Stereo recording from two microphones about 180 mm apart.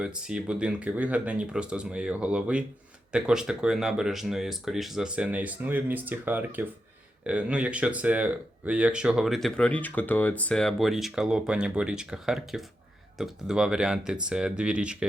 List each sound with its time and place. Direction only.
0.0 s speech: 5° right (ahead or behind)